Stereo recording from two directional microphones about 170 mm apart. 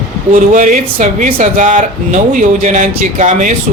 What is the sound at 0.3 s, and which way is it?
Speech, 50° right (ahead or behind).